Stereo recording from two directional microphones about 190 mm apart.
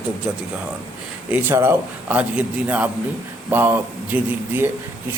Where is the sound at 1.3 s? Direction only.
10° right (ahead or behind).